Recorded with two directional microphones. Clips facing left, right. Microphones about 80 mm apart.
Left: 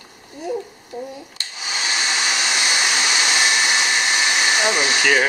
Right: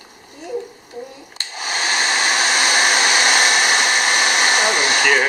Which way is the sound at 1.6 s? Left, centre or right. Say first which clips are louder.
Right 4 dB; right.